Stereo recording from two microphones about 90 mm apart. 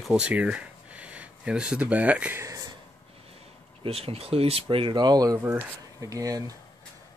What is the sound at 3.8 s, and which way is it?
Speech, 90° right.